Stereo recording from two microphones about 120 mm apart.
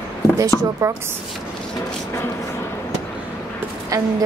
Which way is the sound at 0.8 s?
25° right (ahead or behind).